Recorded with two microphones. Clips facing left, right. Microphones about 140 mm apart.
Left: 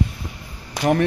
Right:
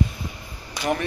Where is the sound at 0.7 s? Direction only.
60° left (ahead or behind).